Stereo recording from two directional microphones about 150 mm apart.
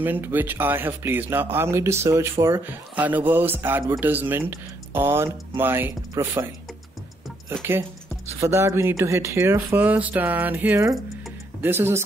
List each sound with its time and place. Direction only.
0.0 s speech: 15° right (ahead or behind)
8.4 s speech: 20° right (ahead or behind)